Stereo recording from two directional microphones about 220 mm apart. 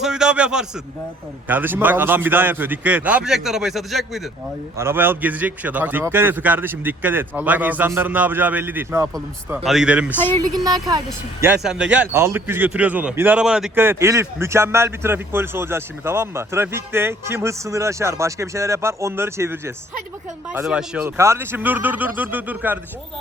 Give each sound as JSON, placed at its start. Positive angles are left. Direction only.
{"t": 0.0, "sound": "a sound", "side_deg": -5}
{"t": 1.5, "sound": "speech", "side_deg": -10}
{"t": 9.6, "sound": "a man's voice", "side_deg": -5}
{"t": 10.5, "sound": "speech", "side_deg": -15}